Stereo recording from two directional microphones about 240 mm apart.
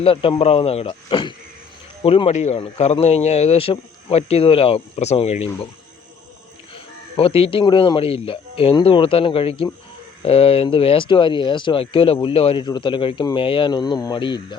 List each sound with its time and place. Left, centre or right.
0.0 s speech: left
7.2 s speech: left